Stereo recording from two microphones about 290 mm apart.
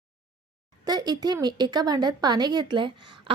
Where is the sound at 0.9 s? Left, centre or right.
Centre.